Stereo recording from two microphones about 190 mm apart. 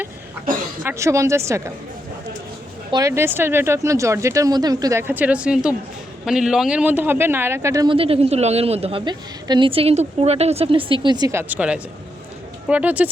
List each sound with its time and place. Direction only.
0.8 s speech: 15° right (ahead or behind)
2.9 s speech: 15° right (ahead or behind)
7.9 s a woman's voice: 30° right (ahead or behind); by 13.1 s 10° right (ahead or behind)